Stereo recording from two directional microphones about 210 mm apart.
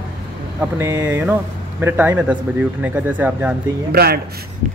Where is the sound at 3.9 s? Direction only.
50° right (ahead or behind).